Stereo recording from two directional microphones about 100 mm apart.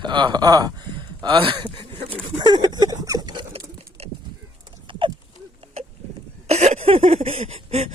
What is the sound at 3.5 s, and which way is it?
Pigeon, 90° right.